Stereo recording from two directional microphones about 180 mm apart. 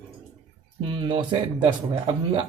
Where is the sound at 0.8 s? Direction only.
30° right (ahead or behind).